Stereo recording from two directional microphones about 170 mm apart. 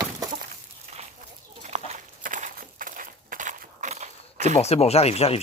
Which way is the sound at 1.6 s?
40° right (ahead or behind).